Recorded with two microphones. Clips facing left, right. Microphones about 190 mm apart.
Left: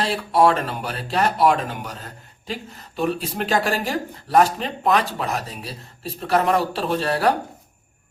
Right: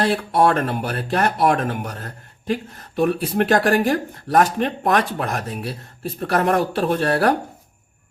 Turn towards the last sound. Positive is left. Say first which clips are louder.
# right 2 dB
turn(degrees=-55)  # may be behind; listen again after turning